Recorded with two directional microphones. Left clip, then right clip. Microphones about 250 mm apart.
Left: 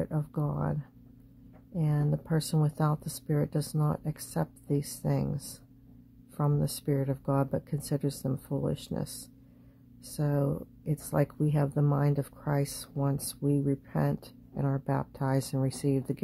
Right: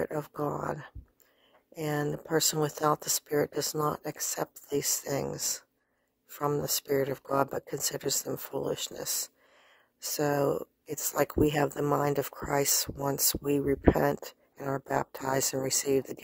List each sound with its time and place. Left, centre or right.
0.0 s speech: right